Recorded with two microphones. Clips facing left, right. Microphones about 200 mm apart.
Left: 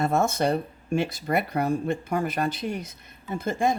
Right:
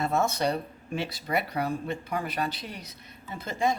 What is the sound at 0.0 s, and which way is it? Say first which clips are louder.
Speech: left 3 dB; 50° left (ahead or behind).